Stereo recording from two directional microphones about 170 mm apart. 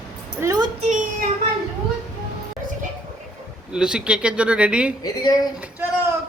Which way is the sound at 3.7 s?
5° right (ahead or behind).